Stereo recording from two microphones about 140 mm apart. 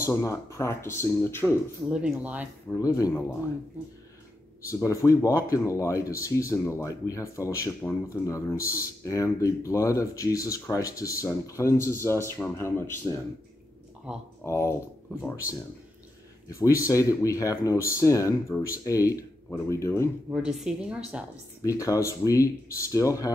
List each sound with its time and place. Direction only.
0.0 s speech: 20° left (ahead or behind)
1.9 s speech: 5° right (ahead or behind)
2.7 s speech: 25° left (ahead or behind)
4.6 s speech: 20° left (ahead or behind)
14.4 s speech: 20° left (ahead or behind)
16.4 s speech: 25° left (ahead or behind)
20.5 s a woman's voice: 5° right (ahead or behind)
21.6 s speech: 20° left (ahead or behind)